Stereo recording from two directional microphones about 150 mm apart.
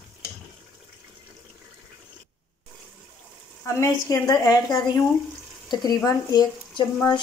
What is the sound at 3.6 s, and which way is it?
Speech, 20° left (ahead or behind).